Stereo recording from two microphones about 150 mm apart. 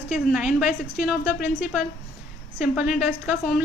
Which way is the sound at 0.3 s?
5° right (ahead or behind).